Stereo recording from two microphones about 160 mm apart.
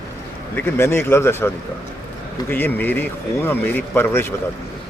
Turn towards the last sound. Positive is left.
turn(degrees=15)  # may be behind; listen again after turning